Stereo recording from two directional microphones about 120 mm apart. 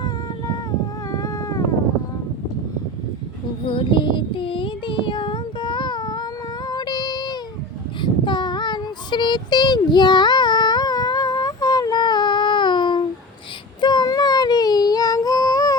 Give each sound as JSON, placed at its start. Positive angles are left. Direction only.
{"t": 1.1, "sound": "cat", "side_deg": 30}
{"t": 3.7, "sound": "child singing", "side_deg": 45}
{"t": 6.7, "sound": "music", "side_deg": 35}
{"t": 8.0, "sound": "child singing", "side_deg": 40}
{"t": 13.8, "sound": "a sound", "side_deg": 35}